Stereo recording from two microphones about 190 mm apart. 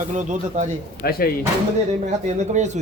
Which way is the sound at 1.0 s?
50° left (ahead or behind).